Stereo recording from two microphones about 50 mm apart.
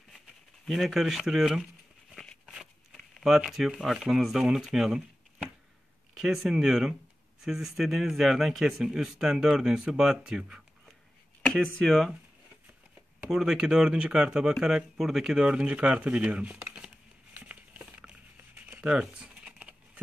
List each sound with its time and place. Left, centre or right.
0.7 s speech: centre
2.9 s a sound: centre
3.3 s speech: centre
11.4 s speech: centre
13.3 s speech: centre
15.4 s speech: right
17.4 s patter: right
18.8 s a sound: centre